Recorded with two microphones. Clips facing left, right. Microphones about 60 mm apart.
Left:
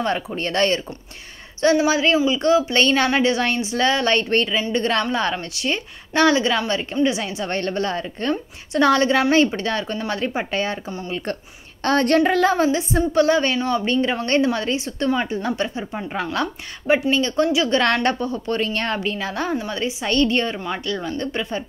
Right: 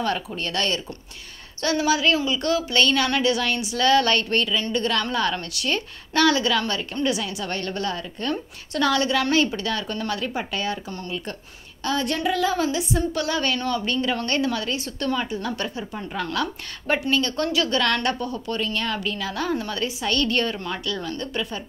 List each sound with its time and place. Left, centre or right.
0.0 s a woman's voice: left
11.8 s child singing: left
12.6 s a woman's voice: left
17.1 s a woman's voice: centre
17.7 s a woman's voice: left